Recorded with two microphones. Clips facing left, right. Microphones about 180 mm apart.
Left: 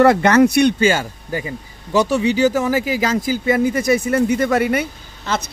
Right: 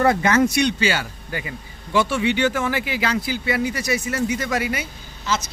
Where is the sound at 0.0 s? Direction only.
70° left (ahead or behind).